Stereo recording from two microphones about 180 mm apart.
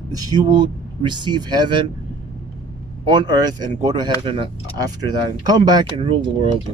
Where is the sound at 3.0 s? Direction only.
25° right (ahead or behind).